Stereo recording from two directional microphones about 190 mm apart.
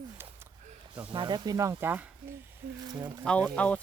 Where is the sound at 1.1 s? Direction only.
25° right (ahead or behind).